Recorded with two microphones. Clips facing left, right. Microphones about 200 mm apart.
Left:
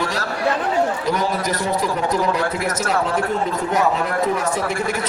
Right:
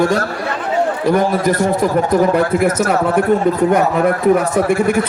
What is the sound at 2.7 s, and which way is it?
A man's voice, 50° right (ahead or behind).